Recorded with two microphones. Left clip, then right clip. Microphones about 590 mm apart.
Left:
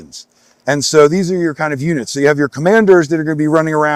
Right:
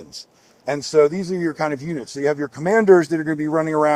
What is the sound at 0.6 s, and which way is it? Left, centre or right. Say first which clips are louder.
Speech: left 7 dB; left.